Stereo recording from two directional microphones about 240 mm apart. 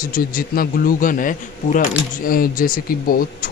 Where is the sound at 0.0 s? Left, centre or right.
Left.